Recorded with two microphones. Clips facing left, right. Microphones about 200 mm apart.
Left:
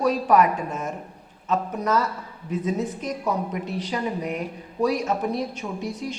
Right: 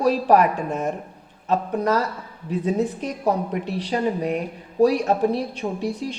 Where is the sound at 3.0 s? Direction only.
35° right (ahead or behind).